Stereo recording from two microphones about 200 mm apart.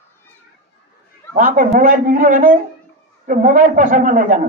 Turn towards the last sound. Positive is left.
turn(degrees=-40)  # may be behind; listen again after turning